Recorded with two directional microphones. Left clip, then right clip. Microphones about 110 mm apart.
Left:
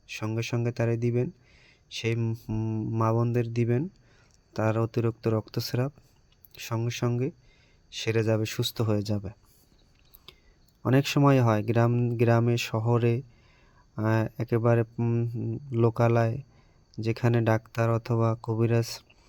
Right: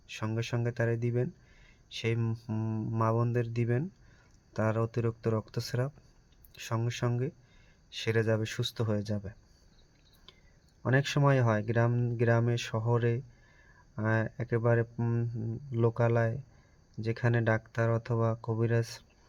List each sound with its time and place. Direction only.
0.1 s speech: 35° left (ahead or behind)
2.1 s speech: 20° left (ahead or behind)
3.0 s speech: 40° left (ahead or behind)
10.3 s cricket: 45° left (ahead or behind)
10.8 s speech: 45° left (ahead or behind)
15.7 s speech: 45° left (ahead or behind)